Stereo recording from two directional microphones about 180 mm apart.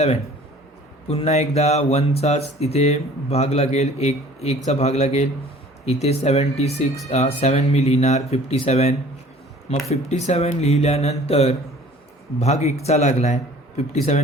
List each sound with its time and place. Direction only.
1.1 s speech: 35° left (ahead or behind)